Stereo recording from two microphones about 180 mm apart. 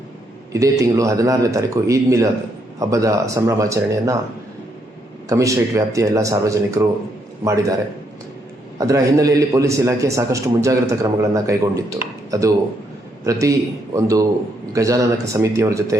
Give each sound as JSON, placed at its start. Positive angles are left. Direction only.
{"t": 0.5, "sound": "a man's voice", "side_deg": -15}
{"t": 5.3, "sound": "a man's voice", "side_deg": -20}
{"t": 8.8, "sound": "a man's voice", "side_deg": -20}